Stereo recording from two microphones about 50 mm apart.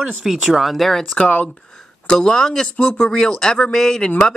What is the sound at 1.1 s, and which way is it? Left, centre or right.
Speech, left.